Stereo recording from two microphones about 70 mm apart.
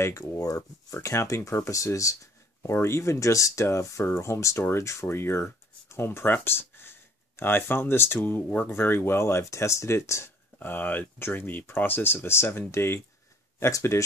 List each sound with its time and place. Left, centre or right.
0.0 s speech: left
2.7 s speech: left
8.5 s speech: left
8.7 s speech: left
10.6 s speech: left